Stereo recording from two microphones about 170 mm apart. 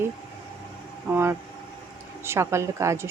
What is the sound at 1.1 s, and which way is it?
Speech, 15° right (ahead or behind).